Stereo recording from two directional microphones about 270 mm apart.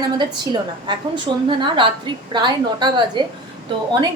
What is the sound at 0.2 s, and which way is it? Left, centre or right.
A woman's voice, centre.